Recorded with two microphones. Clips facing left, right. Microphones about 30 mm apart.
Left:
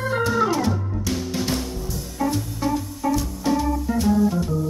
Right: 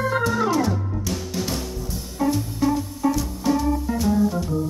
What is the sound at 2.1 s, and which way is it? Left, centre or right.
Music, centre.